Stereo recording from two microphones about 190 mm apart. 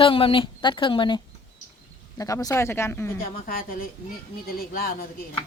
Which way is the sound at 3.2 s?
50° left (ahead or behind).